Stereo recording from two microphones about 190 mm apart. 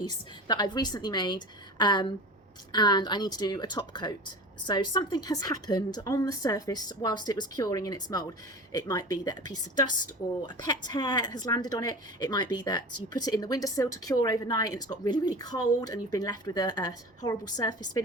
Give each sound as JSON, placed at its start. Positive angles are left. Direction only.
{"t": 0.1, "sound": "speech", "side_deg": 20}